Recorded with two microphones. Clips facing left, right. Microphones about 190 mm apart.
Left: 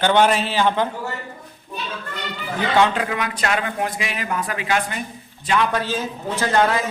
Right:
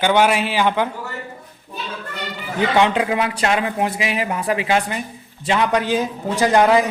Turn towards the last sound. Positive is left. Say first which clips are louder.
# right 5 dB
turn(degrees=-15)  # may be behind; listen again after turning